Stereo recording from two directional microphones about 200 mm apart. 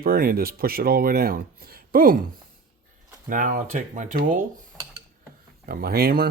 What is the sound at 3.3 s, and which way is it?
Speech, 45° right (ahead or behind).